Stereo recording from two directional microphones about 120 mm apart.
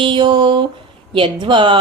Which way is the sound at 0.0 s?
45° right (ahead or behind).